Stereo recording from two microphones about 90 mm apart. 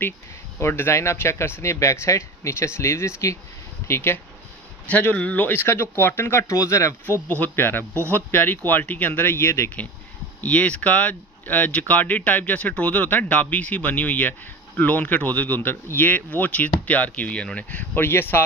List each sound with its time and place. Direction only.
0.6 s speech: 25° left (ahead or behind)
7.0 s speech: 20° left (ahead or behind)
10.4 s speech: 15° left (ahead or behind)